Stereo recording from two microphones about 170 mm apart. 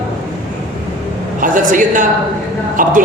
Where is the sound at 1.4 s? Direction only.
50° right (ahead or behind).